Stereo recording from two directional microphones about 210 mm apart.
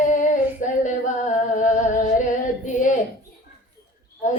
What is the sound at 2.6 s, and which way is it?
Female singing, 35° left (ahead or behind).